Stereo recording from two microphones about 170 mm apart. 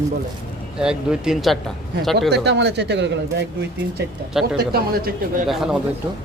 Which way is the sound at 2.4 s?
85° right.